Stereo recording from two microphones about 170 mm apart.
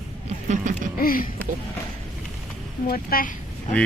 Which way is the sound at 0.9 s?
55° left (ahead or behind).